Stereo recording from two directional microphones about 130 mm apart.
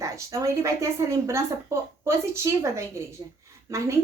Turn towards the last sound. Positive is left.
turn(degrees=-25)  # may be behind; listen again after turning